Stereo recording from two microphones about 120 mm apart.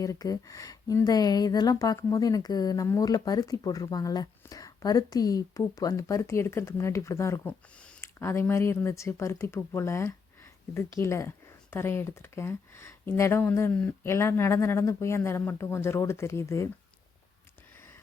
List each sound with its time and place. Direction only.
0.0 s speech: 30° left (ahead or behind)
7.4 s speech: 10° left (ahead or behind)
8.0 s speech: 20° left (ahead or behind)